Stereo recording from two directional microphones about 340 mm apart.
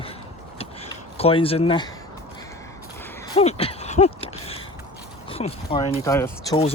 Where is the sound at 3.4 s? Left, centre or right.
Centre.